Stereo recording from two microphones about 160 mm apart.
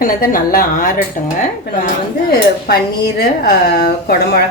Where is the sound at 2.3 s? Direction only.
75° left (ahead or behind).